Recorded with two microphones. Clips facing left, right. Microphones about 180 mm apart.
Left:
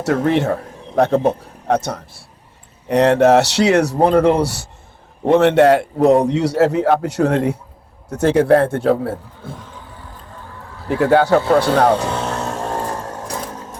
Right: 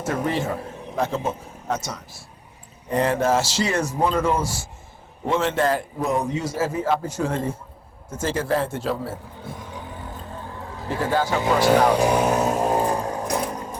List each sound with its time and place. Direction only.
0.0 s a man's voice: 75° left (ahead or behind)
2.9 s a man's voice: 75° left (ahead or behind); by 9.1 s 55° left (ahead or behind)
9.6 s vehicle: 15° right (ahead or behind)
10.8 s speech: 70° left (ahead or behind)
11.9 s vehicle: 15° right (ahead or behind)
13.0 s sewing machine: centre (ahead or behind)
13.2 s sewing machine: 15° right (ahead or behind)